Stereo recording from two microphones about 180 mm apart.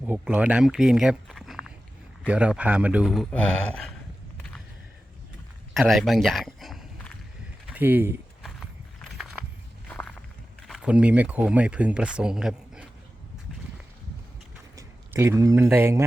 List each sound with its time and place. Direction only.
0.0 s speech: 10° right (ahead or behind)
5.7 s a man's voice: centre (ahead or behind)
7.7 s a sound: 10° right (ahead or behind)
10.6 s speech: 5° right (ahead or behind)
14.8 s speech: 15° right (ahead or behind)